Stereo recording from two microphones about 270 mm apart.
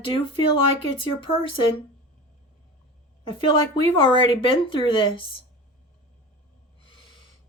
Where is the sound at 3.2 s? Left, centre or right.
Centre.